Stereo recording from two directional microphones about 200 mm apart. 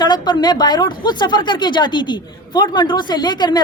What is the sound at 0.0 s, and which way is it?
Speech, 20° left (ahead or behind).